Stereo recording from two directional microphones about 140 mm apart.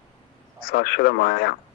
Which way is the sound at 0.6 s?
90° left.